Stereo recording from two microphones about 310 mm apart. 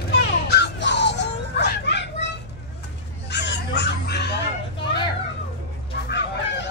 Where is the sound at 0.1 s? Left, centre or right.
Left.